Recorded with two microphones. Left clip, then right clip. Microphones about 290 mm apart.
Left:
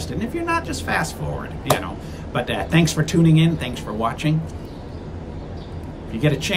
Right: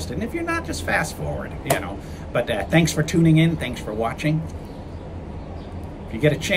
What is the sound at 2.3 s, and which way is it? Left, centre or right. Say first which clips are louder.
Speech: right 1 dB; centre.